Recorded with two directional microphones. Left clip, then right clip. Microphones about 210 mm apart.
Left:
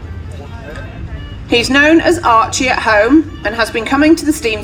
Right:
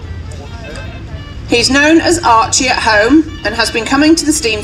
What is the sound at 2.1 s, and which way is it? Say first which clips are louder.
Speech: right 1 dB; 20° right (ahead or behind).